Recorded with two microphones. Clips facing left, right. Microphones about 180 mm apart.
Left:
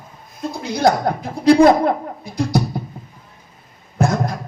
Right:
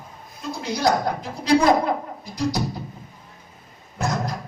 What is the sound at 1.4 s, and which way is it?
Speech, 55° left (ahead or behind).